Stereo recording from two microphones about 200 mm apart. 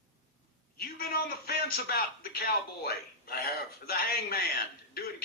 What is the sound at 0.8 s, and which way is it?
A man's voice, 50° left (ahead or behind).